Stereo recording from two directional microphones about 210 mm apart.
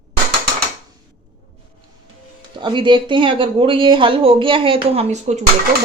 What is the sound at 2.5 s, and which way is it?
Speech, 25° right (ahead or behind).